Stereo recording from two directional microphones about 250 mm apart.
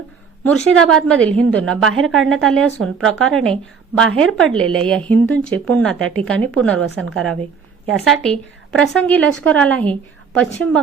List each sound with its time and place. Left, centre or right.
0.4 s a woman's voice: centre
1.9 s a woman's voice: right
2.3 s a woman's voice: centre
7.9 s a woman's voice: centre